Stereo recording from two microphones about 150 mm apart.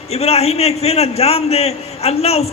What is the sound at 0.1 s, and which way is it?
A man's voice, 45° left (ahead or behind).